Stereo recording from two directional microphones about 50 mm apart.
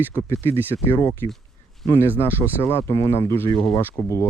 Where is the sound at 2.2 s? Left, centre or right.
Left.